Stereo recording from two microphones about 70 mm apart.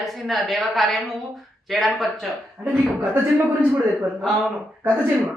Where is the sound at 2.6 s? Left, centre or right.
Right.